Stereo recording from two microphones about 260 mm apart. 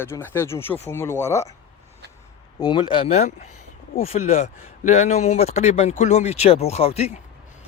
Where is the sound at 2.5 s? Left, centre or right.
Centre.